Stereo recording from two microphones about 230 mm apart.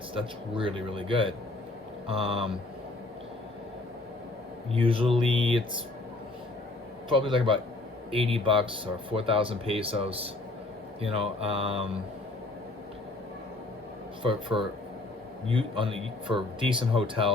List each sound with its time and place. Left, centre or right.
0.1 s speech: right
4.7 s speech: right
7.1 s speech: right
14.2 s speech: right